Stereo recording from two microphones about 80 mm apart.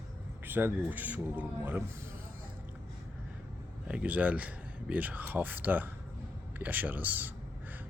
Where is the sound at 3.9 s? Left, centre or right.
Centre.